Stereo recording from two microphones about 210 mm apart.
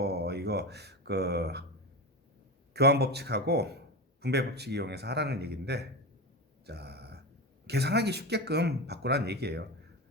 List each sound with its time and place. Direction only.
0.0 s speech: 50° right (ahead or behind)
2.7 s a man's voice: 50° right (ahead or behind)
6.7 s a sound: 50° right (ahead or behind)
7.7 s a man's voice: 50° right (ahead or behind)